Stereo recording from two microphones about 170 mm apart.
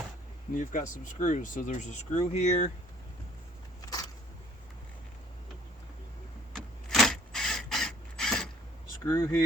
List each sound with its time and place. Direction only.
0.5 s speech: 50° left (ahead or behind)
3.8 s a sound: 20° left (ahead or behind)
6.5 s printer: centre (ahead or behind)
9.0 s speech: 20° left (ahead or behind)